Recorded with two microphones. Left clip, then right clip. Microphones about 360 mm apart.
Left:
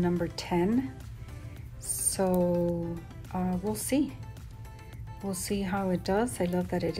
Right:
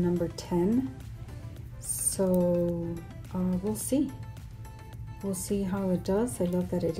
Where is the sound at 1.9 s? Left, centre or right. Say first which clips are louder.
Even; centre.